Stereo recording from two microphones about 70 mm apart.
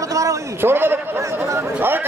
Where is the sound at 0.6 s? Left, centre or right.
Right.